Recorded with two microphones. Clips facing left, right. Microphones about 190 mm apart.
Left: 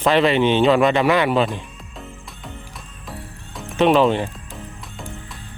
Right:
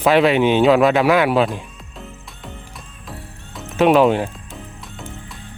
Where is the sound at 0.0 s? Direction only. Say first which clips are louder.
Right 2 dB; 5° right (ahead or behind).